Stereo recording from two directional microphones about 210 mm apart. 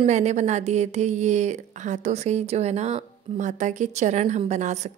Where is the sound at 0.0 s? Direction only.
35° right (ahead or behind).